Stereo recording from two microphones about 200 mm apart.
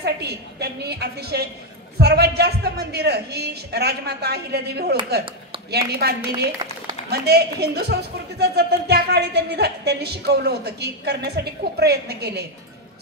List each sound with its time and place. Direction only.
0.0 s a woman's voice: 55° right (ahead or behind)